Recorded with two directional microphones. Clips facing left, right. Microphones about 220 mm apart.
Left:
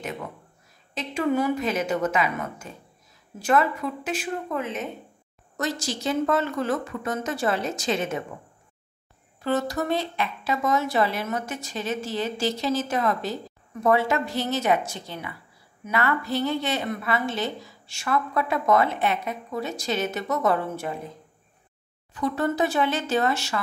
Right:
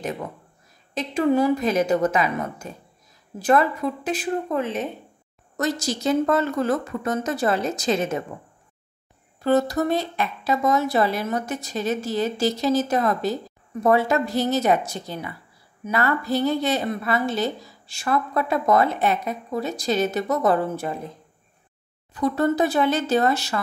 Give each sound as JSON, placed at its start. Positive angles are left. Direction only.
{"t": 0.9, "sound": "a woman's voice", "side_deg": -35}
{"t": 9.4, "sound": "a woman's voice", "side_deg": -40}
{"t": 22.1, "sound": "a woman's voice", "side_deg": -35}